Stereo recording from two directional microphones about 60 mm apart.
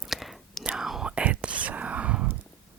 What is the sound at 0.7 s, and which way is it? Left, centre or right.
Whispering, centre.